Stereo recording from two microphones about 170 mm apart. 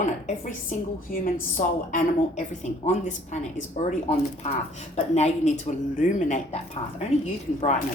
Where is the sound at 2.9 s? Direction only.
45° left (ahead or behind).